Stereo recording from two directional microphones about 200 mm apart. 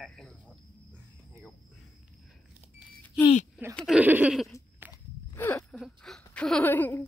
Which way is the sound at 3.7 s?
5° right (ahead or behind).